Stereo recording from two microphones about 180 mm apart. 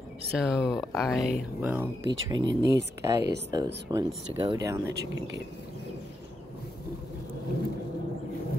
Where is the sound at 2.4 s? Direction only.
75° right (ahead or behind).